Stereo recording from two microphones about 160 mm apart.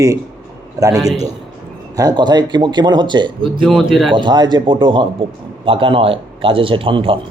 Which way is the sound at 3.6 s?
Centre (ahead or behind).